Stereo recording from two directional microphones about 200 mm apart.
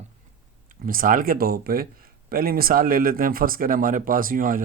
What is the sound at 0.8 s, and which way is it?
Speech, 45° right (ahead or behind).